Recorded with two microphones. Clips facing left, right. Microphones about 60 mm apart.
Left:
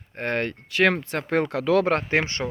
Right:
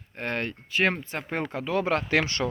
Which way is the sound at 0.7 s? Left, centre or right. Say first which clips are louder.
Left 4 dB; left.